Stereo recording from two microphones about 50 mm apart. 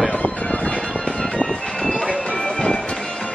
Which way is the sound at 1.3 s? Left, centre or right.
Left.